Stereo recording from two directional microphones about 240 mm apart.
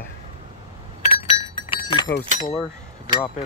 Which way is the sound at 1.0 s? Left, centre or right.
Left.